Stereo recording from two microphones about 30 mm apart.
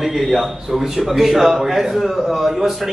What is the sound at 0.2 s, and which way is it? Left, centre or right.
Speech, centre.